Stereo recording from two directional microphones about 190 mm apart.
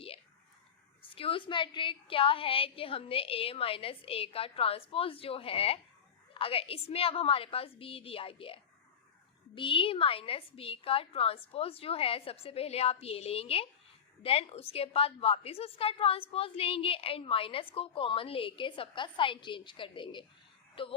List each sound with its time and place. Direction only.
1.1 s a woman's voice: 30° left (ahead or behind)